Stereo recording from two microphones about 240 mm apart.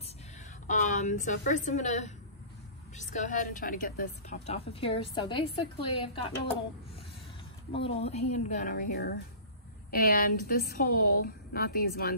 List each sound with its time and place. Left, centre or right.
0.7 s a woman's voice: left
7.7 s a woman's voice: left